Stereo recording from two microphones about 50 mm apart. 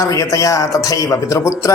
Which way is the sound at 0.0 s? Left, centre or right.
Left.